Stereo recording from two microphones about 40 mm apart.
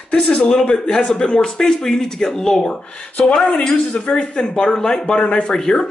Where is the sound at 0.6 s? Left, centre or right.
Left.